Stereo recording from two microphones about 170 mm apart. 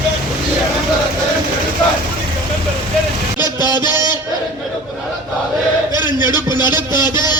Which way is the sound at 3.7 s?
25° left (ahead or behind).